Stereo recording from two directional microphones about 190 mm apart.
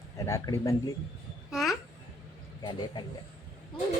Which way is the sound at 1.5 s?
Centre (ahead or behind).